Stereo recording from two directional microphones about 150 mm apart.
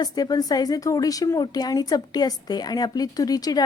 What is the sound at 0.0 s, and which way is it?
Speech, 25° left (ahead or behind).